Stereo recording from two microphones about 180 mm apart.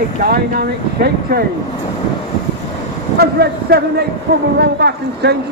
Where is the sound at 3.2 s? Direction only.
60° right (ahead or behind).